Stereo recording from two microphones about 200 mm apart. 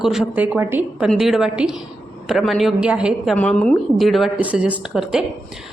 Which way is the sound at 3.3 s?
5° left (ahead or behind).